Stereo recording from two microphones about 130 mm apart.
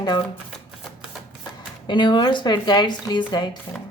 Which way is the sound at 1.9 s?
35° left (ahead or behind).